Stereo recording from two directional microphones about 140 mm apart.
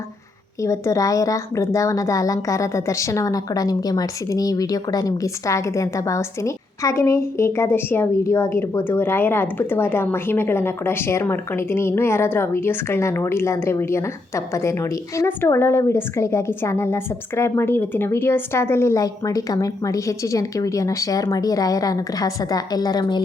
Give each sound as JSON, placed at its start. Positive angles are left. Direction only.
{"t": 0.6, "sound": "a woman's voice", "side_deg": 20}